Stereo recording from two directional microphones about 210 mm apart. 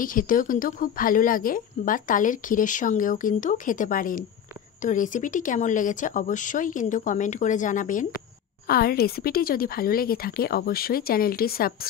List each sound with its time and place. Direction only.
0.0 s a woman's voice: 40° left (ahead or behind)